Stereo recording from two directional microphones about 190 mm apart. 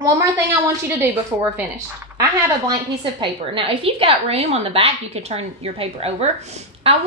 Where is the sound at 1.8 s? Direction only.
15° right (ahead or behind).